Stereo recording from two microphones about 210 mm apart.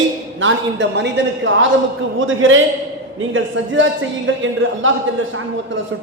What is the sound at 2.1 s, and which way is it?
A man's voice, 70° right (ahead or behind).